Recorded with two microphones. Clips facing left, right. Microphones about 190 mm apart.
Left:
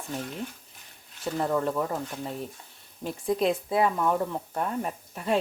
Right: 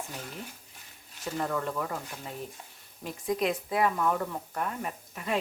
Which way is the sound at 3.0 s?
30° left (ahead or behind).